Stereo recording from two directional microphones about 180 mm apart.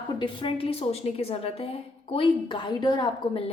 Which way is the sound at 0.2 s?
30° left (ahead or behind).